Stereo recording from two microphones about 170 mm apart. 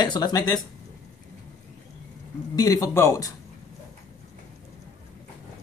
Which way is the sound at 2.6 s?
20° left (ahead or behind).